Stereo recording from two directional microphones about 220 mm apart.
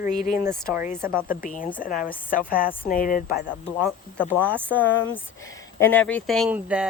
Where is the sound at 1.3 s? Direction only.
40° left (ahead or behind).